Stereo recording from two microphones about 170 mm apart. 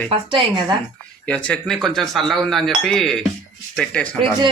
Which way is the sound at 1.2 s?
10° left (ahead or behind).